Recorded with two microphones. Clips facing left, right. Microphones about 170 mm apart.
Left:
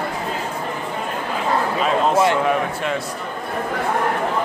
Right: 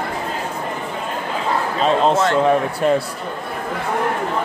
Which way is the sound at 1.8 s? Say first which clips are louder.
Right 2 dB; 30° right (ahead or behind).